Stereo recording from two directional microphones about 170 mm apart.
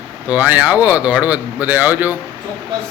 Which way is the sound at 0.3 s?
10° right (ahead or behind).